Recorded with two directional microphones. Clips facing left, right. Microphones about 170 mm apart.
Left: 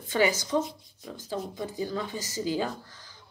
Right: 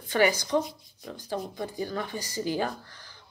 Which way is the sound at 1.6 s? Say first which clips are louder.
Even; 20° left (ahead or behind).